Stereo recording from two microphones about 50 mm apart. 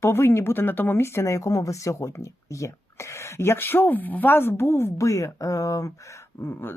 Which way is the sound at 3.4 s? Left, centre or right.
Left.